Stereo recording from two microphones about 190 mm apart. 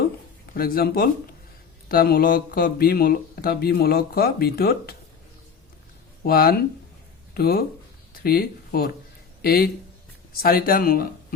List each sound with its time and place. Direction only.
0.5 s speech: 50° left (ahead or behind)
6.2 s speech: 55° left (ahead or behind)